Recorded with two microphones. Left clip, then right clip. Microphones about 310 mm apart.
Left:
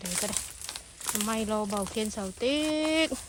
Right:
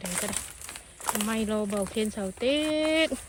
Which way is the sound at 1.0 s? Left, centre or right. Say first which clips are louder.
Right 2 dB; centre.